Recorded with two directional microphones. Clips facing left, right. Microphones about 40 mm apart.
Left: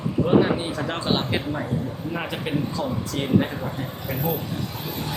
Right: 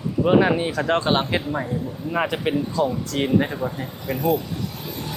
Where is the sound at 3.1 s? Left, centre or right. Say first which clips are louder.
Right 6 dB; right.